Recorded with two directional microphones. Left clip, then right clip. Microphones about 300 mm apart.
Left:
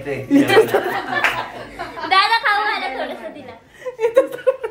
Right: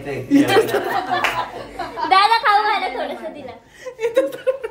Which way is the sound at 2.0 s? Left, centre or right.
Right.